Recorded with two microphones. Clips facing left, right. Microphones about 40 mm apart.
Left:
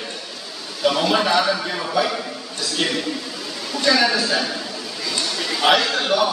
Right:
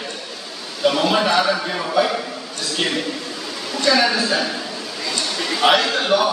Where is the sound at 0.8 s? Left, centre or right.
Centre.